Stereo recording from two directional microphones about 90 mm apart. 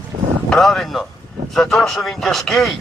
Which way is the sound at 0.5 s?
5° left (ahead or behind).